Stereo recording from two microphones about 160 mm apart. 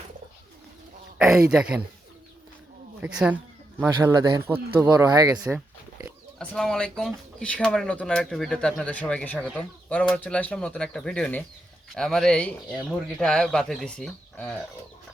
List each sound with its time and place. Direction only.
1.2 s speech: 5° right (ahead or behind)
3.0 s speech: 5° right (ahead or behind)
3.8 s speech: 20° right (ahead or behind)
6.4 s speech: 5° left (ahead or behind)